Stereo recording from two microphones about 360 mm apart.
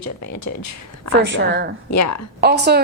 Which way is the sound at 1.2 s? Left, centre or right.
Right.